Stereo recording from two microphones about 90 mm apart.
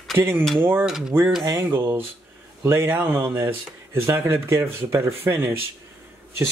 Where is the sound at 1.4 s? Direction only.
30° right (ahead or behind).